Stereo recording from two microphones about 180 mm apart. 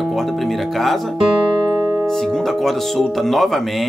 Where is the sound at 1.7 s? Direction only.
20° right (ahead or behind).